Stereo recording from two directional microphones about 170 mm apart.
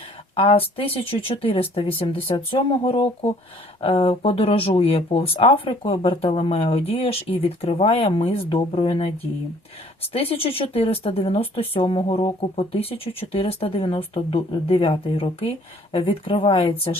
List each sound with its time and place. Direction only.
0.3 s speech: 35° left (ahead or behind)